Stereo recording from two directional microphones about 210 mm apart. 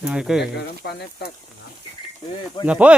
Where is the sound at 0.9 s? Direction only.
50° left (ahead or behind).